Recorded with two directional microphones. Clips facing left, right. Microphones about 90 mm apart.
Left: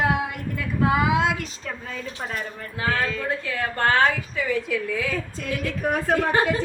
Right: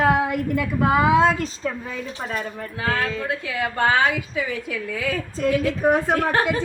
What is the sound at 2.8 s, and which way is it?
A woman's voice, 5° right (ahead or behind).